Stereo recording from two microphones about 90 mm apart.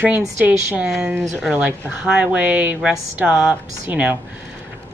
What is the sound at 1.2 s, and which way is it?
Speech, centre (ahead or behind).